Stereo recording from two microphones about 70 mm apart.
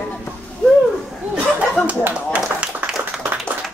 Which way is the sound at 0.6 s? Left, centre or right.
Centre.